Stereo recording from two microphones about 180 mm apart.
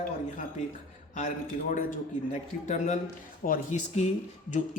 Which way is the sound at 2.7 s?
40° left (ahead or behind).